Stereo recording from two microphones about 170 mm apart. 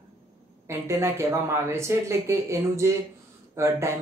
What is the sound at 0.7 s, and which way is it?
Speech, 15° right (ahead or behind).